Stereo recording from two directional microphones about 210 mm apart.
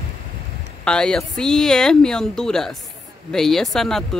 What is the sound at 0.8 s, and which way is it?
Speech, 5° left (ahead or behind).